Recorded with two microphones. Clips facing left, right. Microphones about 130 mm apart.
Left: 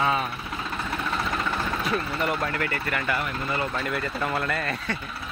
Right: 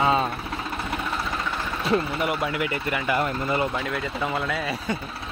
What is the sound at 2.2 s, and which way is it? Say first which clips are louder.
Speech: right 1 dB; 10° right (ahead or behind).